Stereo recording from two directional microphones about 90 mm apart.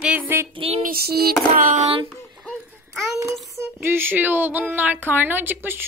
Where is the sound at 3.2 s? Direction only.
Centre (ahead or behind).